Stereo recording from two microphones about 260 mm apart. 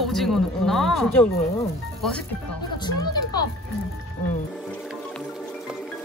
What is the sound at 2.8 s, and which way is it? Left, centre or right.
Music, centre.